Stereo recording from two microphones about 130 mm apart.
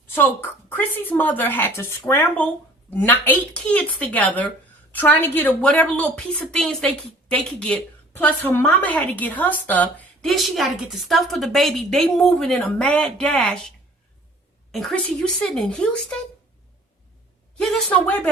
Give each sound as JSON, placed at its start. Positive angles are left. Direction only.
{"t": 0.1, "sound": "speech", "side_deg": 15}
{"t": 14.7, "sound": "speech", "side_deg": 0}
{"t": 17.6, "sound": "speech", "side_deg": 5}